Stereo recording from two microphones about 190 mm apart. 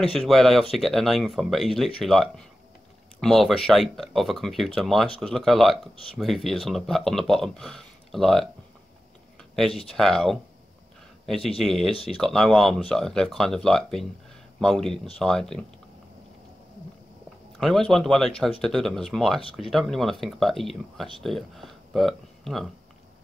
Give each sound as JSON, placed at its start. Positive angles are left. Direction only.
{"t": 0.1, "sound": "speech", "side_deg": 0}
{"t": 9.4, "sound": "a sound", "side_deg": 0}
{"t": 9.8, "sound": "speech", "side_deg": 0}
{"t": 11.9, "sound": "speech", "side_deg": 30}
{"t": 12.2, "sound": "speech", "side_deg": 0}
{"t": 17.6, "sound": "speech", "side_deg": 0}